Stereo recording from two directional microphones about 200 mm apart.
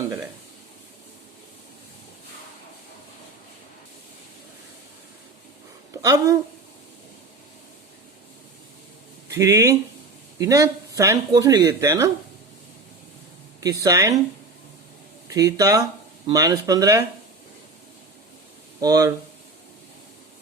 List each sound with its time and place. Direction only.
5.9 s a woman's voice: 15° right (ahead or behind)
9.3 s speech: 15° right (ahead or behind)
13.6 s speech: 15° right (ahead or behind)
15.3 s speech: 15° right (ahead or behind)
18.8 s speech: 20° right (ahead or behind)